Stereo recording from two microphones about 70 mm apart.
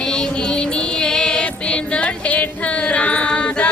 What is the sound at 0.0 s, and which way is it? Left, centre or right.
Music, centre.